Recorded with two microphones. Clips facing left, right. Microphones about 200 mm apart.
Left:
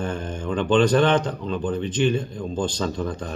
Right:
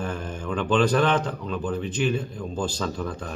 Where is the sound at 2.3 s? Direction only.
25° left (ahead or behind).